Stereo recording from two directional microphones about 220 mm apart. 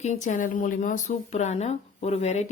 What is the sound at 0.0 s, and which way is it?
A woman's voice, 35° left (ahead or behind).